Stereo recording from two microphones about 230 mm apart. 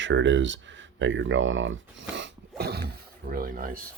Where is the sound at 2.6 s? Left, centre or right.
Right.